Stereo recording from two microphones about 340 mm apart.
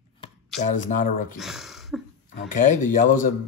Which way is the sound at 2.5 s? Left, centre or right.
Left.